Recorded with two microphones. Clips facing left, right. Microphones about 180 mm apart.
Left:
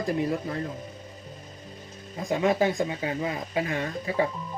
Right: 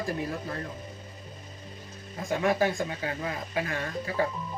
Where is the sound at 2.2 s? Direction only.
20° left (ahead or behind).